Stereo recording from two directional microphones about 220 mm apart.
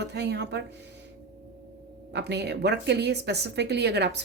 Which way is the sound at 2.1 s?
50° right (ahead or behind).